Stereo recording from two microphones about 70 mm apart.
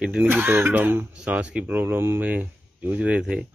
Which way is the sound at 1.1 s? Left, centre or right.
Centre.